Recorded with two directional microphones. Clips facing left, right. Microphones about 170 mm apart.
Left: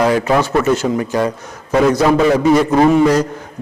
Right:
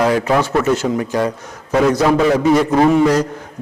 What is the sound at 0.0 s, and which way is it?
A man's voice, 20° left (ahead or behind).